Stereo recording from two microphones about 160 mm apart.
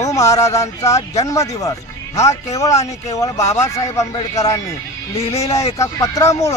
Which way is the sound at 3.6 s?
20° left (ahead or behind).